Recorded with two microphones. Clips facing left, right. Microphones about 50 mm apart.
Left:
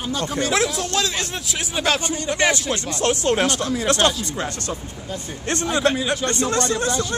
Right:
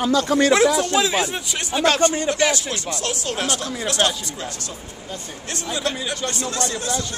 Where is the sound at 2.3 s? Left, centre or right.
Left.